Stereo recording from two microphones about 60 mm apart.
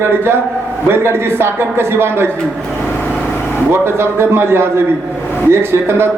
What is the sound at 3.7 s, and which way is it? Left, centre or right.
A man's voice, right.